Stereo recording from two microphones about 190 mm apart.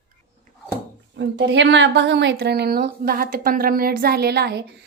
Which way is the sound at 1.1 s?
70° right (ahead or behind).